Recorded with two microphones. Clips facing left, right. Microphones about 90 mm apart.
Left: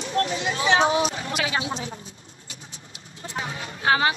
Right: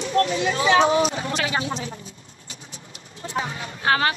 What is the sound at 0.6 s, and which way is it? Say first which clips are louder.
Speech: right 2 dB; 30° left (ahead or behind).